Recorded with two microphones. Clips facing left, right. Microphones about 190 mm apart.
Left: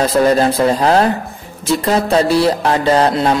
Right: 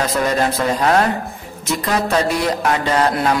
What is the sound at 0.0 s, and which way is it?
Speech, 30° left (ahead or behind).